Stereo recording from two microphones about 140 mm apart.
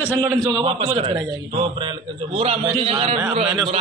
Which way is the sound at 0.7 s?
40° right (ahead or behind).